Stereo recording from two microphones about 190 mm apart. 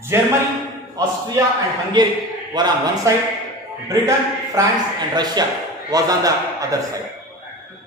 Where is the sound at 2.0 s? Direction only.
25° right (ahead or behind).